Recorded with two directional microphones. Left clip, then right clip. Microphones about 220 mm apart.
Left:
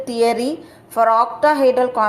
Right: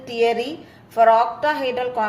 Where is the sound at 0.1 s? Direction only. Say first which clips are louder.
Left 2 dB; 20° left (ahead or behind).